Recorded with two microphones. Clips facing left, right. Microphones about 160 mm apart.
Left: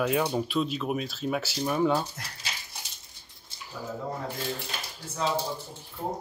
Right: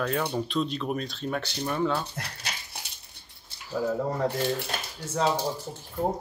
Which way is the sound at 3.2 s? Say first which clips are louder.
Right 1 dB; 65° right (ahead or behind).